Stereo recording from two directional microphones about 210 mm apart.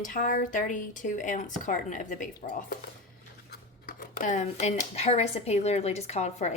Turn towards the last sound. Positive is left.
turn(degrees=30)  # may be behind; listen again after turning